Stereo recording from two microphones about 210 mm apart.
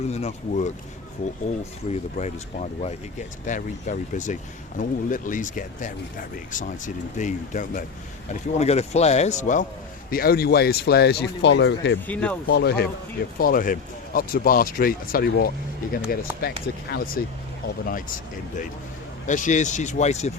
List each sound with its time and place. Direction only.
0.1 s speech: 30° left (ahead or behind); by 11.9 s 60° left (ahead or behind)
12.0 s speech: 5° left (ahead or behind)
12.5 s speech: 55° left (ahead or behind)
19.2 s speech: 35° left (ahead or behind)